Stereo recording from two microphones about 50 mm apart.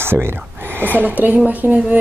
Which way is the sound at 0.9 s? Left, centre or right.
Right.